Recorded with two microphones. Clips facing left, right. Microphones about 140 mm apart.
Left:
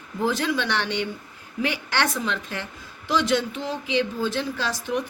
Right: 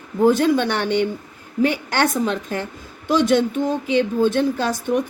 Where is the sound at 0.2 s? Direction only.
50° right (ahead or behind).